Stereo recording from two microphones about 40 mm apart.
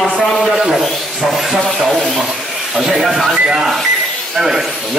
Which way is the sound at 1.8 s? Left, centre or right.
Centre.